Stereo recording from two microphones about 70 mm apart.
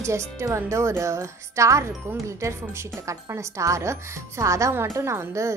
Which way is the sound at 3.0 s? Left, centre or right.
Right.